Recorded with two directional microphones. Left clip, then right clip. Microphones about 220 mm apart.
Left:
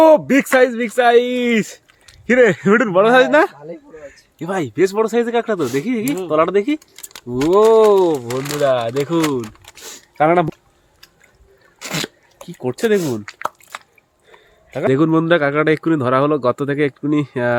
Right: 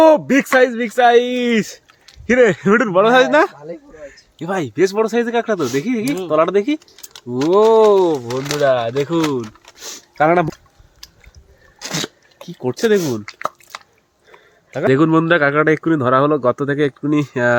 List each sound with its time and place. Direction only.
0.0 s speech: 5° left (ahead or behind)
9.8 s a sound: 5° right (ahead or behind)
11.8 s sneeze: 20° left (ahead or behind)
12.4 s speech: centre (ahead or behind)
13.2 s a sound: 5° left (ahead or behind)
14.3 s speech: centre (ahead or behind)